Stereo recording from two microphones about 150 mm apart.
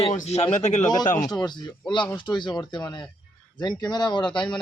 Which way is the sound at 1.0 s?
65° left (ahead or behind).